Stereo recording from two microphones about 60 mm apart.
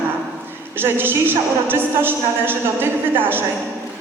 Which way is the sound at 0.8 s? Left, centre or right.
Right.